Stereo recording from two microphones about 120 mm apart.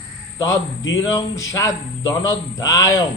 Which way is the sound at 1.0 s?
30° left (ahead or behind).